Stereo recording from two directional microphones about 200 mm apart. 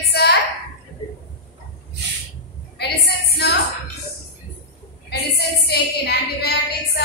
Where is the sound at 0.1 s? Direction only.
55° left (ahead or behind).